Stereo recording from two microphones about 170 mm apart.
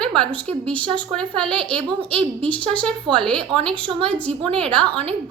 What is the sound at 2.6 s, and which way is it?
Speech, 5° left (ahead or behind).